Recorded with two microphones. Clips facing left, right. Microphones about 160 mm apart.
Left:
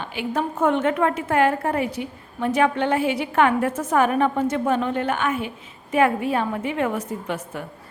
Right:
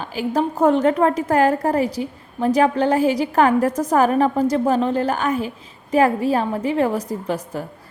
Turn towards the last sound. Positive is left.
turn(degrees=-35)  # may be behind; listen again after turning